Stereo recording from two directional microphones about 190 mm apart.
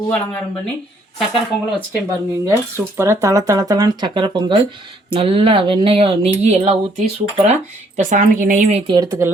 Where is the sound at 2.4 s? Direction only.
15° right (ahead or behind).